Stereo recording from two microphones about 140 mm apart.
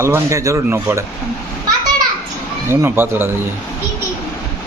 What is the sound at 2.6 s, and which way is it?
Speech, 15° right (ahead or behind).